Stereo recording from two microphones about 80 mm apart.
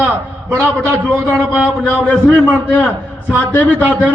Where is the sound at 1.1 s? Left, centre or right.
Right.